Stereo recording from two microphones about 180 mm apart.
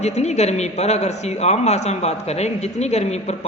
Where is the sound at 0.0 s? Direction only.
40° left (ahead or behind).